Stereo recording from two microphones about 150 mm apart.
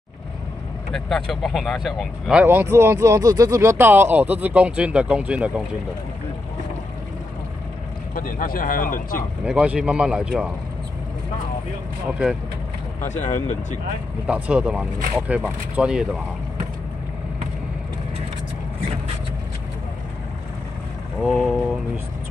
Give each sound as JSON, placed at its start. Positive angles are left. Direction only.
{"t": 0.9, "sound": "speech", "side_deg": 0}
{"t": 2.4, "sound": "speech", "side_deg": -15}
{"t": 8.1, "sound": "speech", "side_deg": 65}
{"t": 9.4, "sound": "speech", "side_deg": -5}
{"t": 13.0, "sound": "speech", "side_deg": 50}
{"t": 14.2, "sound": "speech", "side_deg": -10}
{"t": 21.2, "sound": "speech", "side_deg": 0}